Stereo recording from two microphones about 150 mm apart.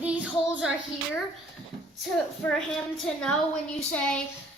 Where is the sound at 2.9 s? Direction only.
5° left (ahead or behind).